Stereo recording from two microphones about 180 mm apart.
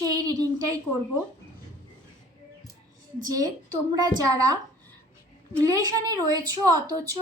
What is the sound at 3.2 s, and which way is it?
Speech, 20° right (ahead or behind).